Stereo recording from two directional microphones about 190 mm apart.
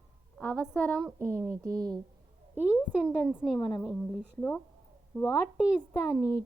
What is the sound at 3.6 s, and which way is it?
Speech, 25° left (ahead or behind).